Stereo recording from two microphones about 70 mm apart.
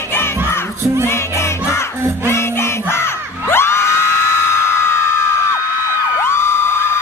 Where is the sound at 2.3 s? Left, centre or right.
Left.